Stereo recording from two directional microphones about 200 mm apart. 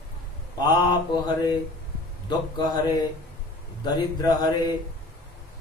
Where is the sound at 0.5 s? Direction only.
20° left (ahead or behind).